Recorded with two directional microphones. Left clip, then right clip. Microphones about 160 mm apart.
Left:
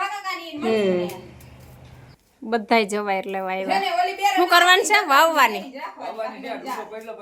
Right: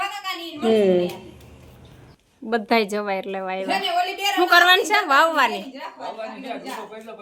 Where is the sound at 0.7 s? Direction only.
20° right (ahead or behind).